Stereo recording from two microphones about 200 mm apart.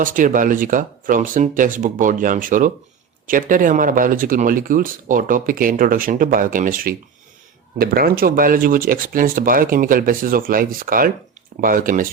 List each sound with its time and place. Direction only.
0.0 s speech: 40° right (ahead or behind)